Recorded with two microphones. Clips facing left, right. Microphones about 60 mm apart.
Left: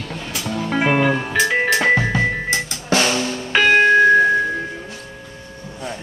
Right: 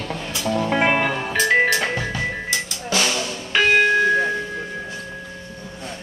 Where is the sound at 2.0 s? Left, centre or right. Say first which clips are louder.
Left 6 dB; left.